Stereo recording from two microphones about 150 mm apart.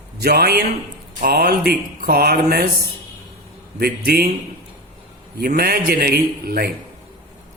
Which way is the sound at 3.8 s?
85° right.